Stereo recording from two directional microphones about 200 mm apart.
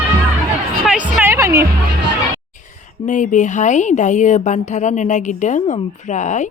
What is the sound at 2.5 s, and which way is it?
Speech, 40° left (ahead or behind).